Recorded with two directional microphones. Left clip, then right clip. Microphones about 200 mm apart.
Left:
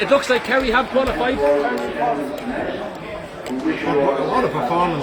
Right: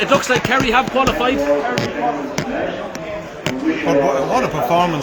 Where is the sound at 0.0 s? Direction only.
15° right (ahead or behind).